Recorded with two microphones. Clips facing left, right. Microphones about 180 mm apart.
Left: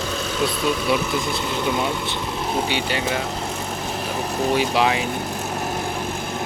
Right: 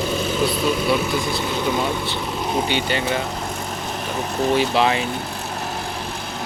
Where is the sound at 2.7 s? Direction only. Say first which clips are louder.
Right 2 dB; 5° left (ahead or behind).